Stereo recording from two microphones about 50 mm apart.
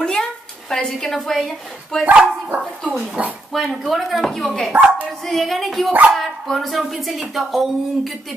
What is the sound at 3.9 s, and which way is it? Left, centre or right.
Speech, centre.